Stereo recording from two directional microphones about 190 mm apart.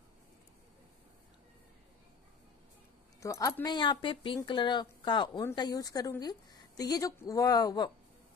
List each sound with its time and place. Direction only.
3.2 s a woman's voice: 15° left (ahead or behind)